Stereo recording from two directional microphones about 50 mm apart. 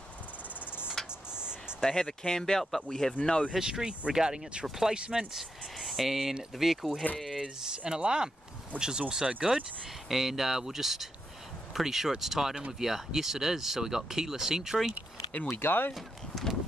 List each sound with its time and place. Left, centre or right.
1.0 s a sound: centre
1.9 s speech: centre
3.2 s speech: centre
3.5 s speech: centre
4.9 s speech: centre
5.3 s speech: centre
7.2 s a sound: centre
7.4 s speech: centre
15.5 s speech: left
15.9 s speech: centre